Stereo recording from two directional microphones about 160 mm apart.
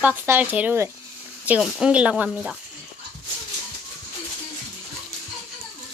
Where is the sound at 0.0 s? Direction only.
10° right (ahead or behind).